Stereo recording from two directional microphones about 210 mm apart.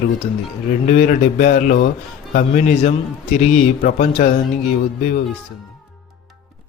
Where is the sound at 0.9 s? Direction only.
35° left (ahead or behind).